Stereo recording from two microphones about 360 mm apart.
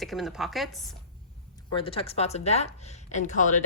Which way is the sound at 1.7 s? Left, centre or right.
Centre.